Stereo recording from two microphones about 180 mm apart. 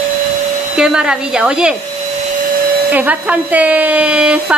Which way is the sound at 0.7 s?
5° right (ahead or behind).